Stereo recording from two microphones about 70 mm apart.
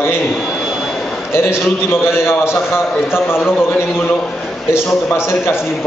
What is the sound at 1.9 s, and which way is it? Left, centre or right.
A man's voice, left.